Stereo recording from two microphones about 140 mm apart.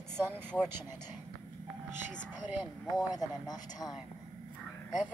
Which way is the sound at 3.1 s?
25° left (ahead or behind).